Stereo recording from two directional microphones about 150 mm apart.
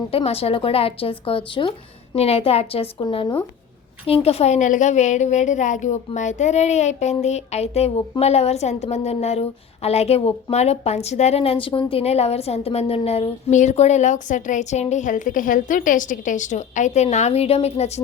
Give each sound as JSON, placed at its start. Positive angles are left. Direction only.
{"t": 0.1, "sound": "a woman's voice", "side_deg": 40}